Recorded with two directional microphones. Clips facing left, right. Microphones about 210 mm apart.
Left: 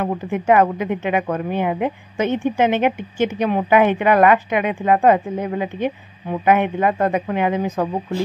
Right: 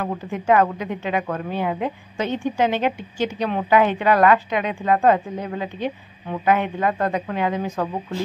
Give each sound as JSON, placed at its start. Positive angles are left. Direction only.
{"t": 0.0, "sound": "speech", "side_deg": 20}